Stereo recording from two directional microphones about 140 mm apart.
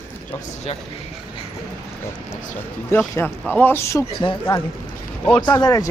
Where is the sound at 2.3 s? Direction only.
15° left (ahead or behind).